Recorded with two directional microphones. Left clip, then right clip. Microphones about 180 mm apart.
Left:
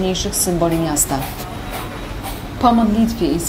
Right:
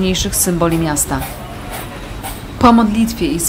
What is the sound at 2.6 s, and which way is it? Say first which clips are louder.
Speech: right 3 dB; 20° right (ahead or behind).